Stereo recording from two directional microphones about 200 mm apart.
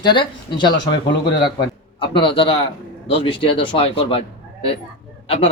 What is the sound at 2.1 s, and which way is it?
Speech, 25° left (ahead or behind).